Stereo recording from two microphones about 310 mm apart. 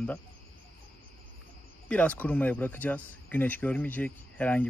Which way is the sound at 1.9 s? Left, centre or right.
Centre.